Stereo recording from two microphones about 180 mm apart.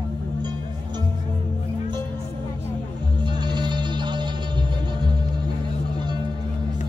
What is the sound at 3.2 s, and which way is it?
Music, 25° right (ahead or behind).